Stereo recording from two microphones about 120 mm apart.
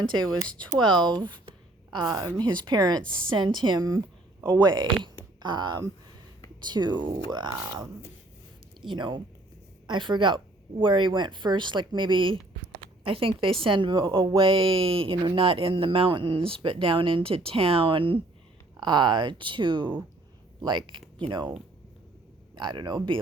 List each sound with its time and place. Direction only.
0.0 s a woman's voice: 40° right (ahead or behind)
3.0 s a woman's voice: 10° left (ahead or behind)
3.3 s a woman's voice: 40° right (ahead or behind)
8.9 s a woman's voice: 40° right (ahead or behind)
22.5 s a woman's voice: 40° right (ahead or behind)